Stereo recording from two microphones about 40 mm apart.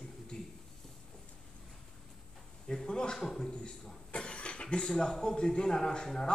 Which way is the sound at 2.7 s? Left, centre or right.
Centre.